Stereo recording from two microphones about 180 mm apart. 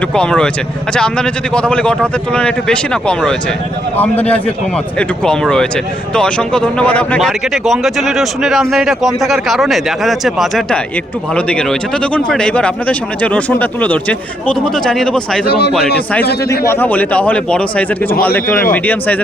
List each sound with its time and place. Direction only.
0.1 s a man's voice: 5° left (ahead or behind)
15.4 s speech: 65° left (ahead or behind)
16.4 s a man's voice: 15° left (ahead or behind)